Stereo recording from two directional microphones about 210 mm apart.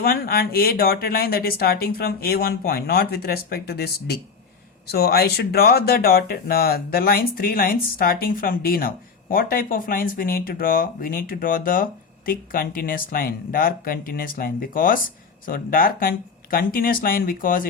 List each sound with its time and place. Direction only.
0.0 s speech: 45° left (ahead or behind)